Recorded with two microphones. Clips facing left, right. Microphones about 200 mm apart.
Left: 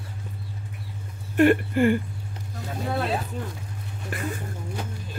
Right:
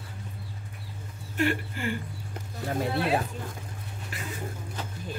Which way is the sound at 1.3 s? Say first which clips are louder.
Left 10 dB; 55° left (ahead or behind).